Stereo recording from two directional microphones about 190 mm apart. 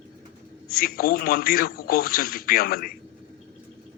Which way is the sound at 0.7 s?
50° left (ahead or behind).